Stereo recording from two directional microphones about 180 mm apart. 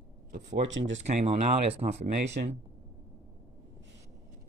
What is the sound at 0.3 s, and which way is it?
Speech, 85° right.